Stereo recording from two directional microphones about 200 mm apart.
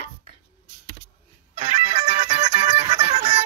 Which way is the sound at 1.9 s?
25° right (ahead or behind).